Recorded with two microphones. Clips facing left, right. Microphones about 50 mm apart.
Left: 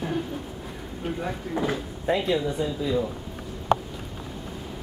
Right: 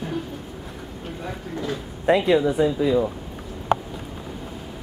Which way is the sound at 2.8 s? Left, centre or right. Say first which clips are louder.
Right 3 dB; right.